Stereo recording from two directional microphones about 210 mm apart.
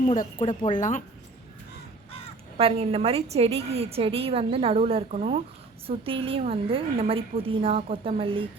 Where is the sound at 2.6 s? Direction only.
25° right (ahead or behind).